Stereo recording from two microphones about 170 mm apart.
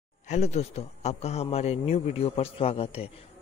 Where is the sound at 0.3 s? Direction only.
40° left (ahead or behind).